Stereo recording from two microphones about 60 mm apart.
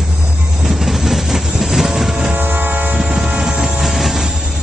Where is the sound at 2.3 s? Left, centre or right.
Right.